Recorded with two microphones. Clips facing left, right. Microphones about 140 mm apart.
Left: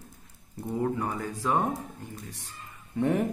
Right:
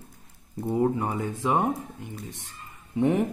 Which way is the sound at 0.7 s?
25° right (ahead or behind).